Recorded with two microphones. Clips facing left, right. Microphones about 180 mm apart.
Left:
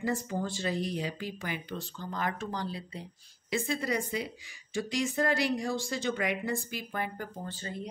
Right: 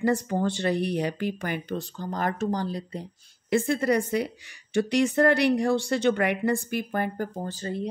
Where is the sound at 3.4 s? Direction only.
60° right (ahead or behind); by 7.9 s 35° right (ahead or behind).